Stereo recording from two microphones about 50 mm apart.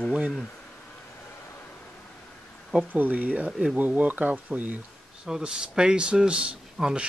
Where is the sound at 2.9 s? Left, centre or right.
Right.